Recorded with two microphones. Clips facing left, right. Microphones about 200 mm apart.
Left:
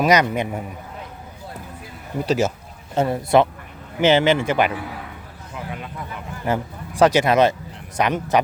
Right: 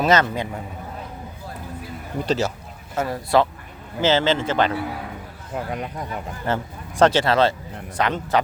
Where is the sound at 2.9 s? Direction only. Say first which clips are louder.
Left 3 dB; 25° left (ahead or behind).